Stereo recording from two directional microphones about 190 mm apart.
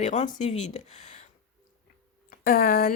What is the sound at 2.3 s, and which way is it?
Speech, 50° left (ahead or behind).